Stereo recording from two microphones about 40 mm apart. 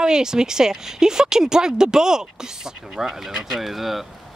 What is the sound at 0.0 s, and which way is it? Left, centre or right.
Speech, centre.